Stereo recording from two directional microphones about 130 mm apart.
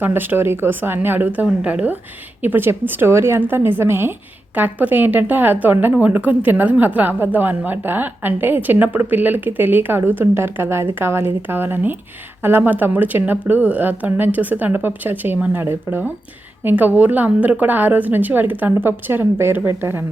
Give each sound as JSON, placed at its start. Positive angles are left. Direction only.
{"t": 0.0, "sound": "a woman's voice", "side_deg": -15}